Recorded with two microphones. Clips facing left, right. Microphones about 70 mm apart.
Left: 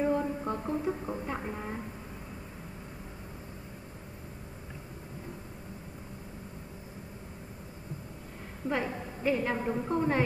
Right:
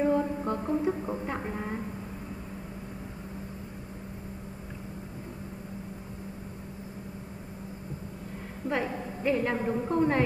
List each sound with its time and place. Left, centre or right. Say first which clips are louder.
0.0 s music: right 3 dB; centre
8.6 s a woman's voice: right 2 dB; centre